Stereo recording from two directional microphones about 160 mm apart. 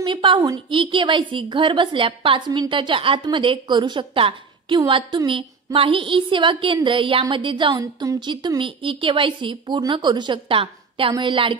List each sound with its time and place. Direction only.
0.0 s a woman's voice: 30° right (ahead or behind)